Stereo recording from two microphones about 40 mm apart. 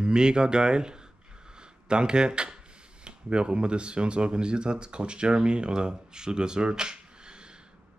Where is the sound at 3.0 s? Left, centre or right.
Right.